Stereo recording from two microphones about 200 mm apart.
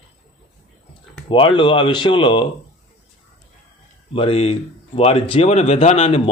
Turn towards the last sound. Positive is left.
turn(degrees=30)  # may be behind; listen again after turning